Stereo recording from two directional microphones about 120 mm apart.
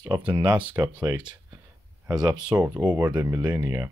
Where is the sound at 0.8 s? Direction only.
35° right (ahead or behind).